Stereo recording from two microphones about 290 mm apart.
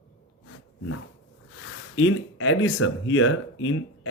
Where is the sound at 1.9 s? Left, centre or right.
Left.